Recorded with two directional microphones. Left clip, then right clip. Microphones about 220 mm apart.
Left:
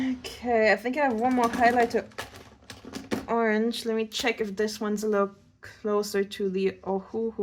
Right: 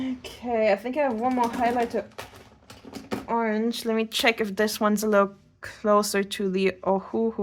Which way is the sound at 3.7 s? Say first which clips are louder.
Right 2 dB; 35° right (ahead or behind).